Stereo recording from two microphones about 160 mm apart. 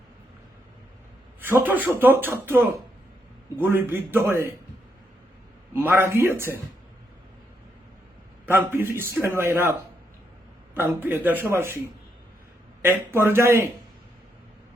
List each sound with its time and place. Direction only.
1.4 s speech: 10° right (ahead or behind)
5.7 s speech: 15° right (ahead or behind)
8.4 s speech: 15° right (ahead or behind)
10.8 s speech: 10° right (ahead or behind)
12.8 s speech: 15° right (ahead or behind)